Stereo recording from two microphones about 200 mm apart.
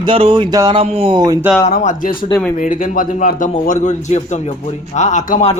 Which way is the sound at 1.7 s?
40° left (ahead or behind).